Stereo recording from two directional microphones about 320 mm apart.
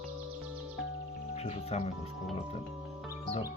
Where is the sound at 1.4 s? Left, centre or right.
Centre.